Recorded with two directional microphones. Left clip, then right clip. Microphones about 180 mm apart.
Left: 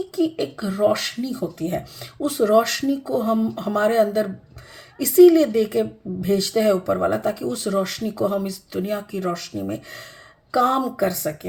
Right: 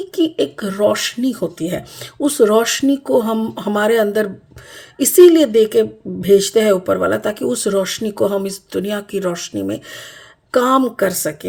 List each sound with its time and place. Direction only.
0.2 s speech: 55° right (ahead or behind)